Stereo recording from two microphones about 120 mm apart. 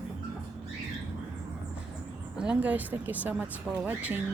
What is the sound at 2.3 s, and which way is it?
Speech, 10° right (ahead or behind).